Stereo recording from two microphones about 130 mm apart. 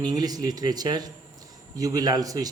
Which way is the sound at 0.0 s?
30° right (ahead or behind).